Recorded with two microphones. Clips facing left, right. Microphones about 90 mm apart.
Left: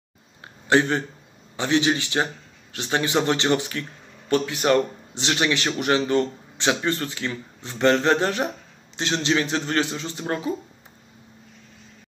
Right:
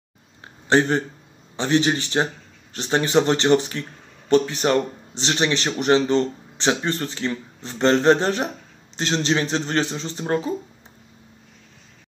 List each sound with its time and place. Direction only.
0.7 s speech: 30° right (ahead or behind)